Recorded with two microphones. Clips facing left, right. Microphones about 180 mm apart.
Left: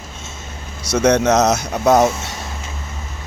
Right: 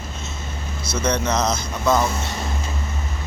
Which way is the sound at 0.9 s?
75° left (ahead or behind).